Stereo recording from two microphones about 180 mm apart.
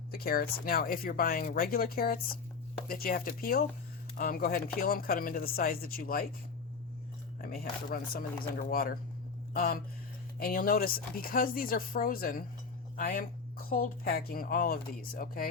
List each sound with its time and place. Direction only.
0.1 s speech: 55° left (ahead or behind)
7.4 s speech: 55° left (ahead or behind)